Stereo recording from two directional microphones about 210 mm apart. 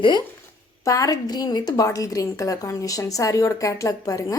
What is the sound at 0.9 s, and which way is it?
A woman's voice, 15° left (ahead or behind).